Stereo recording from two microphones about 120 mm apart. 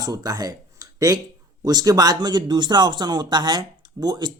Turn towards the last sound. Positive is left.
turn(degrees=-35)  # may be behind; listen again after turning